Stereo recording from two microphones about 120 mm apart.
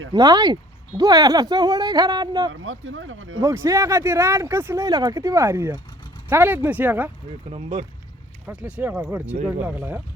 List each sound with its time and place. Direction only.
0.1 s speech: 35° right (ahead or behind); by 7.1 s 15° right (ahead or behind)
7.5 s speech: 50° right (ahead or behind)
8.4 s speech: 10° right (ahead or behind)